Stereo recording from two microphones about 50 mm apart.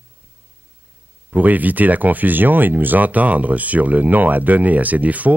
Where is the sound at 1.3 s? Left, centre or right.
Right.